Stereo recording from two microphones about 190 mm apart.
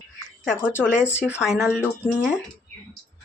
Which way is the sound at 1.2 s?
Centre (ahead or behind).